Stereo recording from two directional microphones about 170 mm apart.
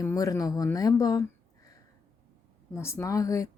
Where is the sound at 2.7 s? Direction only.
15° left (ahead or behind).